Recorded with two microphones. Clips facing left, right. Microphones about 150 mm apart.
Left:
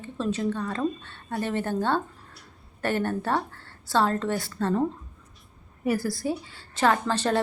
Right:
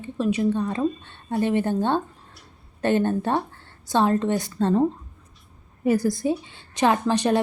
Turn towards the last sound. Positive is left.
turn(degrees=-15)  # may be behind; listen again after turning